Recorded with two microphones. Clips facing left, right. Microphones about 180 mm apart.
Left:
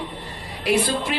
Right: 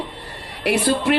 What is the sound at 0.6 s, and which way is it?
Speech, 70° right (ahead or behind).